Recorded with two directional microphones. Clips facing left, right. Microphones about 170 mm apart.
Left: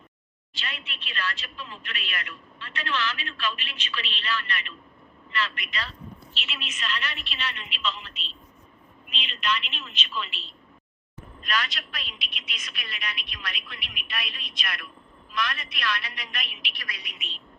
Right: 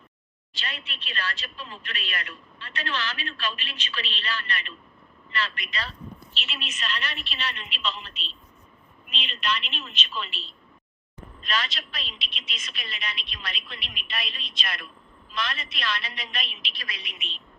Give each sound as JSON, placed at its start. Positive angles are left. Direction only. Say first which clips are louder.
{"t": 0.5, "sound": "speech", "louder": "right 1 dB", "side_deg": -35}
{"t": 9.1, "sound": "speech", "louder": "left 1 dB", "side_deg": -35}
{"t": 11.4, "sound": "a woman's voice", "louder": "even", "side_deg": -25}